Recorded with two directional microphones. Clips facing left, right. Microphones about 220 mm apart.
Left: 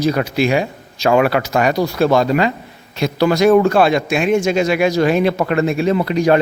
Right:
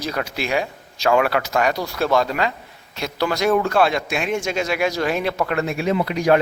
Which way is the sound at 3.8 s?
5° left (ahead or behind).